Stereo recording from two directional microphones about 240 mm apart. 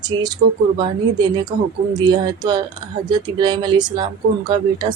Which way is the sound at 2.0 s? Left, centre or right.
Centre.